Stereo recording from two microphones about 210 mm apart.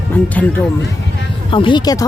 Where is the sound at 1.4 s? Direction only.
25° left (ahead or behind).